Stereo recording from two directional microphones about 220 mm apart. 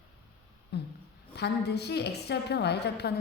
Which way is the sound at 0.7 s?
50° left (ahead or behind).